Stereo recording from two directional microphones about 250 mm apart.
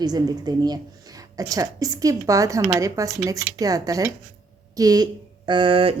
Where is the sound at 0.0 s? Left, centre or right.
Centre.